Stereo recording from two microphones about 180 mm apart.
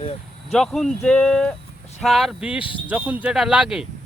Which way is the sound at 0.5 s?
Centre (ahead or behind).